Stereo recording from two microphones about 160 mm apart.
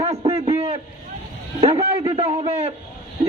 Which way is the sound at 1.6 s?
40° right (ahead or behind).